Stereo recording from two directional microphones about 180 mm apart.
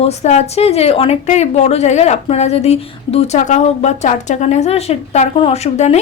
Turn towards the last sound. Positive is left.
turn(degrees=35)  # may be behind; listen again after turning